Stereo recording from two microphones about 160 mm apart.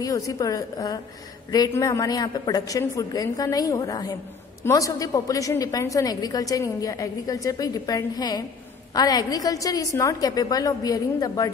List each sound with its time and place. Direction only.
0.0 s a woman's voice: 20° left (ahead or behind)